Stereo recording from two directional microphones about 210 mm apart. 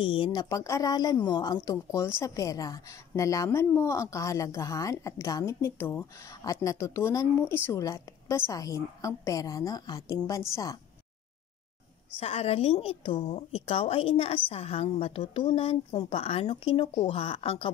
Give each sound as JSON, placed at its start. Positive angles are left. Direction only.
{"t": 0.0, "sound": "speech", "side_deg": 25}
{"t": 12.2, "sound": "a woman's voice", "side_deg": 30}